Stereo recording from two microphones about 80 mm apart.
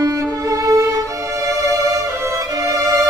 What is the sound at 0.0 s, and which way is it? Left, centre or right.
Music, right.